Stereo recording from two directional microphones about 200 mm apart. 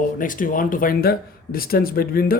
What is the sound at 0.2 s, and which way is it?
Speech, 45° left (ahead or behind).